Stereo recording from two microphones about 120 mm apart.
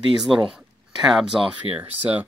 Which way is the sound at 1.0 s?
5° right (ahead or behind).